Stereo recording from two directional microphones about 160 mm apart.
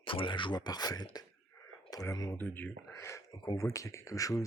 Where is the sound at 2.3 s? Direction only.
10° left (ahead or behind).